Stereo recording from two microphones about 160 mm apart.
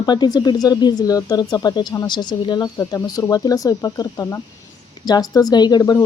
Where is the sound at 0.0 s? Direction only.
25° left (ahead or behind).